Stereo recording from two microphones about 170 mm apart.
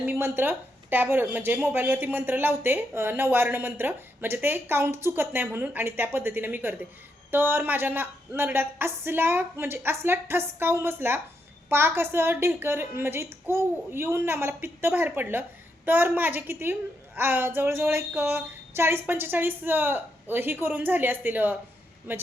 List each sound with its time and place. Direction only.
0.0 s a woman's voice: 15° right (ahead or behind)